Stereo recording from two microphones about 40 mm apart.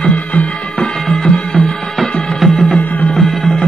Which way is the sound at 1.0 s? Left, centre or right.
Centre.